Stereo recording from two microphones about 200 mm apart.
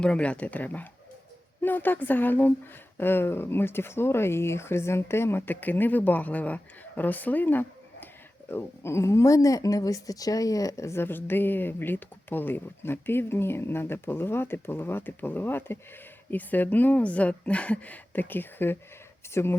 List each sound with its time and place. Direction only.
0.0 s speech: 5° left (ahead or behind)